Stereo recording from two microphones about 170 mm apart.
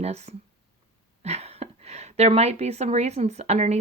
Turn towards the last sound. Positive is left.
turn(degrees=-40)  # may be behind; listen again after turning